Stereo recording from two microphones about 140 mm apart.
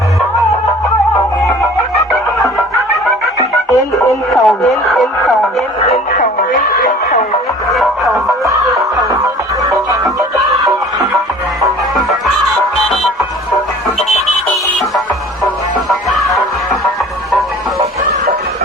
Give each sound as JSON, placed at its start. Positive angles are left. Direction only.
{"t": 4.3, "sound": "radio", "side_deg": 0}
{"t": 6.1, "sound": "music", "side_deg": 70}
{"t": 7.7, "sound": "music", "side_deg": 0}
{"t": 8.4, "sound": "music", "side_deg": -25}
{"t": 11.6, "sound": "music", "side_deg": 0}
{"t": 15.9, "sound": "music", "side_deg": 0}